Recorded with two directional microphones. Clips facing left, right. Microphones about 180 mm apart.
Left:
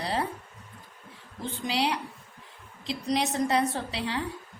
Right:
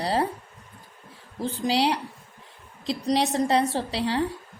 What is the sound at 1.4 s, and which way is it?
A woman's voice, 35° right (ahead or behind).